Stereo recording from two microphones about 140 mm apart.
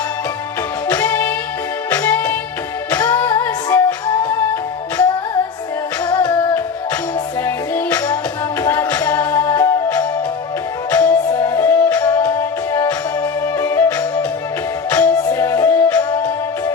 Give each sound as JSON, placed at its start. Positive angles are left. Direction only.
{"t": 0.9, "sound": "music", "side_deg": 15}
{"t": 15.1, "sound": "music", "side_deg": 25}